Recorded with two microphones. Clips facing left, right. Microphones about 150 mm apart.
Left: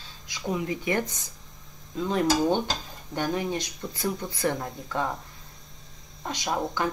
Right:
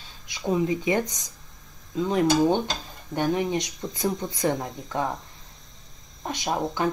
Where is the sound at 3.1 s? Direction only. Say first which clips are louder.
Right 3 dB; 20° right (ahead or behind).